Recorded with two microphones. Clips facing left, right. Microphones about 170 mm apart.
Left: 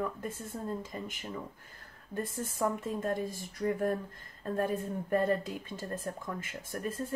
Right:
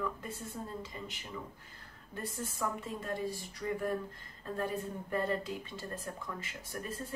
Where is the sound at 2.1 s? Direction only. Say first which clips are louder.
Left 5 dB; 50° left (ahead or behind).